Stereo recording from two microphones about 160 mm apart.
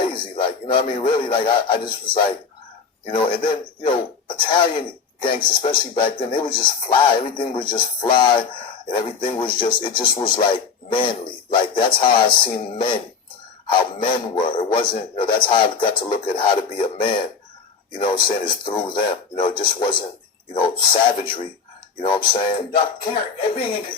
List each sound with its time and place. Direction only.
0.1 s speech: 30° left (ahead or behind)